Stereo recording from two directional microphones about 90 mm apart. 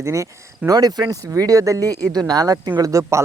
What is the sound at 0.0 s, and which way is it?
Speech, 35° right (ahead or behind).